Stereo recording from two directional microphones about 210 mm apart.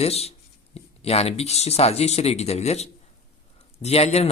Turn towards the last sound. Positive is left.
turn(degrees=30)  # may be behind; listen again after turning